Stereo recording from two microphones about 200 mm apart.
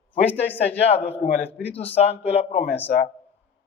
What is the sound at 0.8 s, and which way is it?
A man's voice, 30° left (ahead or behind).